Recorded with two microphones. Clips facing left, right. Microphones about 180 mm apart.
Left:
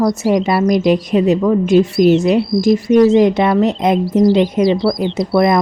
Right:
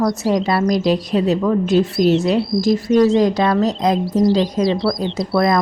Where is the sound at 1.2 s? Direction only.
10° left (ahead or behind).